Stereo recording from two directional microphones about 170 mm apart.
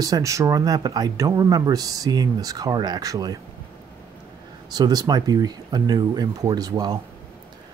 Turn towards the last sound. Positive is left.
turn(degrees=-25)  # may be behind; listen again after turning